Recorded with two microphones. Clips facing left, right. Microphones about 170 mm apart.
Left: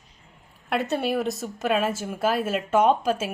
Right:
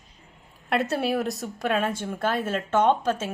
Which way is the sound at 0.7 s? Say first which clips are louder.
Even; centre (ahead or behind).